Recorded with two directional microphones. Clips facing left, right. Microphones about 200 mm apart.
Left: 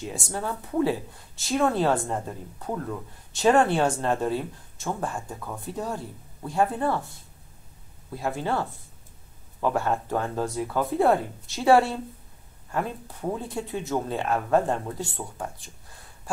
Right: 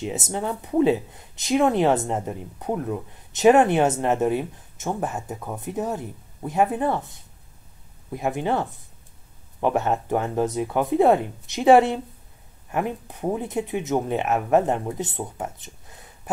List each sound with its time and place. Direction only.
0.0 s speech: 20° right (ahead or behind)